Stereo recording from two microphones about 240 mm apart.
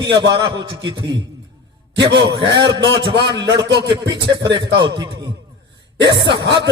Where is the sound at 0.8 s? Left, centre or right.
Right.